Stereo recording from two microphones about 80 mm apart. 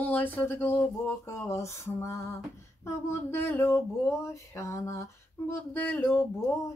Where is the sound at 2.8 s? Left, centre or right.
Left.